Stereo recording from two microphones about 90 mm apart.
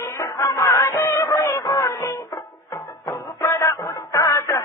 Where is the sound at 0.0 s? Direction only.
35° left (ahead or behind).